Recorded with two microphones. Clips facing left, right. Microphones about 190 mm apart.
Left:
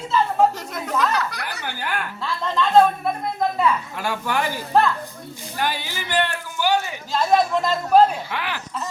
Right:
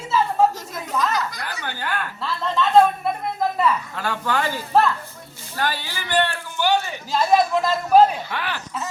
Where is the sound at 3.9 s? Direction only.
10° left (ahead or behind).